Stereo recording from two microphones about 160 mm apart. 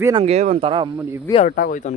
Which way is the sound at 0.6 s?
30° right (ahead or behind).